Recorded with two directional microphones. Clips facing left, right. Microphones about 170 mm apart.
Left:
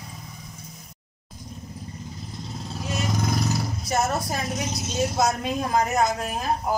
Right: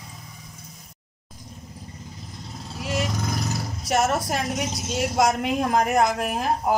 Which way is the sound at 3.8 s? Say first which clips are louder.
Right 3 dB; 90° right.